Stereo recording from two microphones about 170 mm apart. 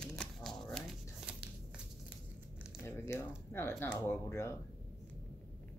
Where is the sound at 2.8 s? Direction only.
15° left (ahead or behind).